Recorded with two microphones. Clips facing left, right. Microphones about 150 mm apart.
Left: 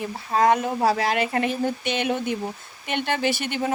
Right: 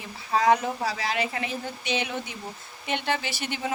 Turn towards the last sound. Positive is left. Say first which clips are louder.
# left 7 dB
turn(degrees=55)  # may be behind; listen again after turning